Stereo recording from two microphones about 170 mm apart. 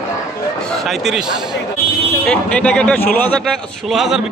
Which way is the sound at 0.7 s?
Centre (ahead or behind).